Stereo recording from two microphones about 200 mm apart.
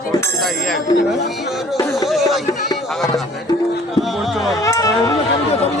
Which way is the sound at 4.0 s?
Centre (ahead or behind).